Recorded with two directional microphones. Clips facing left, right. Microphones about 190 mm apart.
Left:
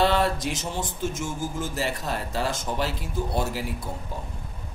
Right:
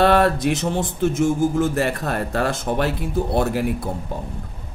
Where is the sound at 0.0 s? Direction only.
60° right (ahead or behind).